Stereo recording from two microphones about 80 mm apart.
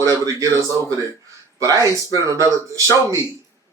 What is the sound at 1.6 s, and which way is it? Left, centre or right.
Speech, right.